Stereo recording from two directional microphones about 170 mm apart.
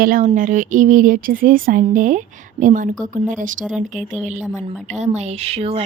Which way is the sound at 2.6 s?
50° right (ahead or behind).